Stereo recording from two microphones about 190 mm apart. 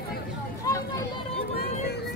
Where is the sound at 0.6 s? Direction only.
15° left (ahead or behind).